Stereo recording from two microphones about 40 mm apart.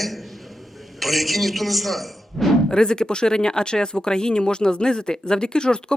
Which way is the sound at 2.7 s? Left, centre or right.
Centre.